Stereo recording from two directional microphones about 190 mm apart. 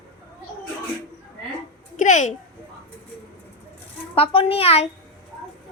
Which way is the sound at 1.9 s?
40° left (ahead or behind).